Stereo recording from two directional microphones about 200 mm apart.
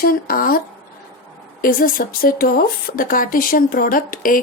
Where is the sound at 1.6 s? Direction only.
45° left (ahead or behind).